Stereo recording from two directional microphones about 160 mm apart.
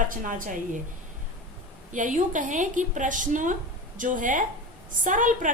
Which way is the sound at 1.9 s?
50° right (ahead or behind).